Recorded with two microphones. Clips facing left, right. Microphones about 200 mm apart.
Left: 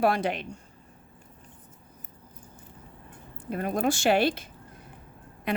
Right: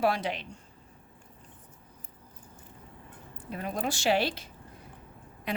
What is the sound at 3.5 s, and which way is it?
Speech, 50° left (ahead or behind).